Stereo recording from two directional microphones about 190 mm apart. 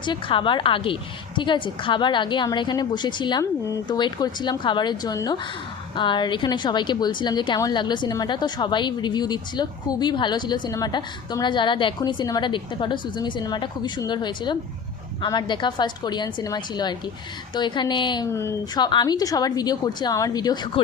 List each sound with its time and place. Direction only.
0.0 s speech: 25° left (ahead or behind)